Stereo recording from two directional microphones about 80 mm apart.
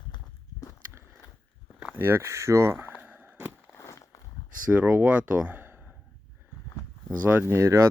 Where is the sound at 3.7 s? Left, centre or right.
Left.